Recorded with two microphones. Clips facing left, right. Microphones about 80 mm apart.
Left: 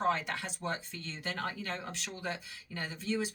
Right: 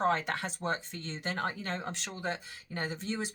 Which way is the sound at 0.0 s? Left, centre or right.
Right.